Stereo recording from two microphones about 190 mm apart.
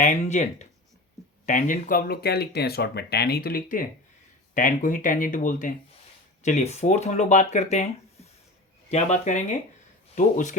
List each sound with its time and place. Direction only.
0.0 s speech: 40° left (ahead or behind)